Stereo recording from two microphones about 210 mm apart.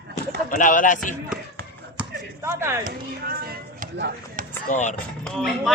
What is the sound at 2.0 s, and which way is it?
Chop, 10° right (ahead or behind).